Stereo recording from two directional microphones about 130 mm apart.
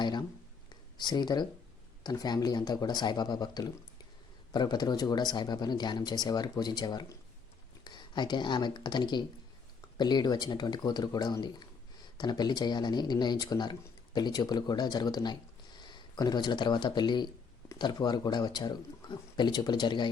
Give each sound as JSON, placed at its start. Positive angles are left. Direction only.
{"t": 0.0, "sound": "speech", "side_deg": 35}